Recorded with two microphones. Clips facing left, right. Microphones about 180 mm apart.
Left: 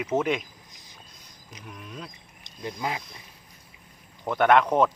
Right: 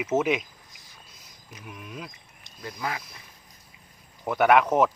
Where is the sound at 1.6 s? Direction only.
5° right (ahead or behind).